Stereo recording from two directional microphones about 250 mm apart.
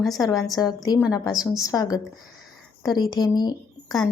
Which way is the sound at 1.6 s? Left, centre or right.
Centre.